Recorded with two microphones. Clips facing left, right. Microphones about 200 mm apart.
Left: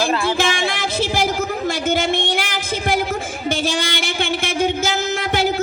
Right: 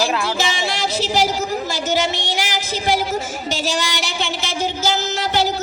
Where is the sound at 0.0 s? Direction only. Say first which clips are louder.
Left 1 dB; centre (ahead or behind).